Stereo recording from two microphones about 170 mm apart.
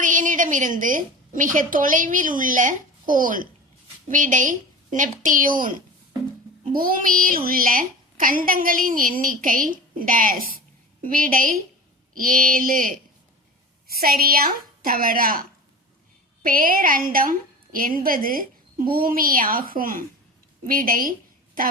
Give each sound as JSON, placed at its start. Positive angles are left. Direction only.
{"t": 0.0, "sound": "a woman's voice", "side_deg": -50}
{"t": 6.7, "sound": "a woman's voice", "side_deg": -55}